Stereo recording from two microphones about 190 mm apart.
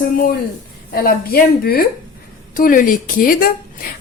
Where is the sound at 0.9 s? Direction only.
50° left (ahead or behind).